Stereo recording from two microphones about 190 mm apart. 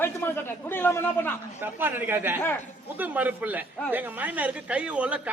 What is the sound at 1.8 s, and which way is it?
Speech, 10° right (ahead or behind).